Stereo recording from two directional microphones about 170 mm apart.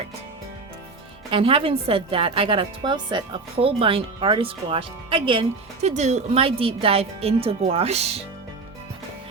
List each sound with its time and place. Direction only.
1.3 s a woman's voice: 35° right (ahead or behind)
5.9 s a woman's voice: 45° right (ahead or behind)